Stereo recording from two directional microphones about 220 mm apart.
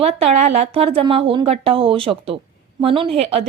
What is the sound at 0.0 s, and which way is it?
A woman's voice, 30° right (ahead or behind).